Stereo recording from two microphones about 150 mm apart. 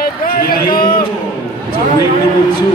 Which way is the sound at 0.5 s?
75° left (ahead or behind).